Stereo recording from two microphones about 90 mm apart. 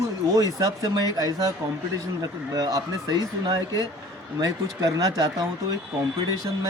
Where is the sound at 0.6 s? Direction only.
45° right (ahead or behind).